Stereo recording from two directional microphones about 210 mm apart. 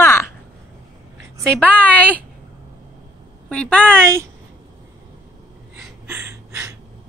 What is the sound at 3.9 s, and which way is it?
Speech, 10° right (ahead or behind).